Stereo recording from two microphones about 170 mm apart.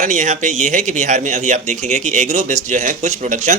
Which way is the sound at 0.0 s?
45° right (ahead or behind).